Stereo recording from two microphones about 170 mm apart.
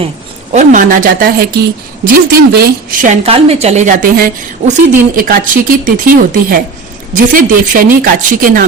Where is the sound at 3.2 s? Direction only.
35° right (ahead or behind).